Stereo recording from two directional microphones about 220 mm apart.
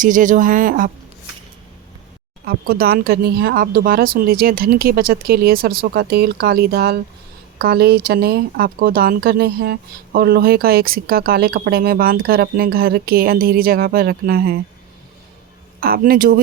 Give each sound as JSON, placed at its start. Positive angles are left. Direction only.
{"t": 0.0, "sound": "speech", "side_deg": -35}
{"t": 2.4, "sound": "speech", "side_deg": -45}
{"t": 15.8, "sound": "speech", "side_deg": -40}